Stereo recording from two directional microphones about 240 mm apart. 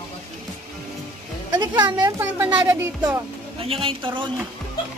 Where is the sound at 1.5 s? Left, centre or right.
Centre.